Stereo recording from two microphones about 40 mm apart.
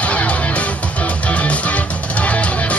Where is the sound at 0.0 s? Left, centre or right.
Left.